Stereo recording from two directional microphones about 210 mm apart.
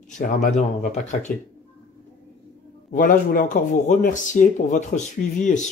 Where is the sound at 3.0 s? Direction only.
40° left (ahead or behind).